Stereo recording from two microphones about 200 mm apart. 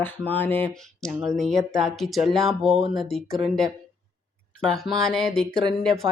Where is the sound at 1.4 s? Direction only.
Centre (ahead or behind).